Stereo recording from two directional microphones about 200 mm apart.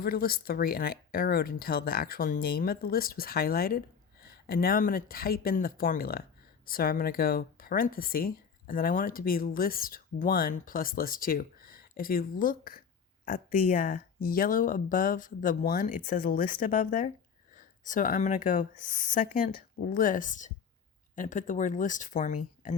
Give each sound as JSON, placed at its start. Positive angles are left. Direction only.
{"t": 0.0, "sound": "speech", "side_deg": 50}